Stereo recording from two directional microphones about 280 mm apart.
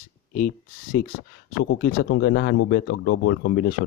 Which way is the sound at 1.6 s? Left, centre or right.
Left.